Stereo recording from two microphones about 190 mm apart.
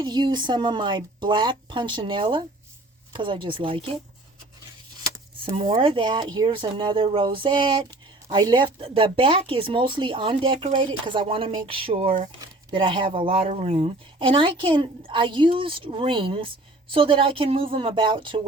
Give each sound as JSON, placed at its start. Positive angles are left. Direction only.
{"t": 0.0, "sound": "speech", "side_deg": -25}
{"t": 5.7, "sound": "speech", "side_deg": -25}